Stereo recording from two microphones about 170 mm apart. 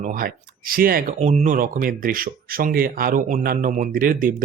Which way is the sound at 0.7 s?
60° right (ahead or behind).